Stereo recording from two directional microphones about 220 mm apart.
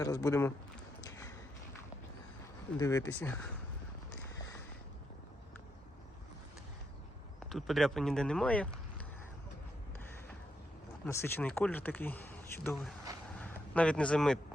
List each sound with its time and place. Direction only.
0.0 s speech: 15° left (ahead or behind)
1.0 s a sound: 15° left (ahead or behind)
2.7 s speech: 15° left (ahead or behind)
7.3 s speech: centre (ahead or behind)
11.0 s speech: 10° left (ahead or behind)